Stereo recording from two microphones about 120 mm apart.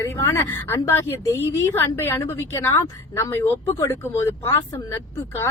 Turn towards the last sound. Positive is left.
turn(degrees=25)  # may be behind; listen again after turning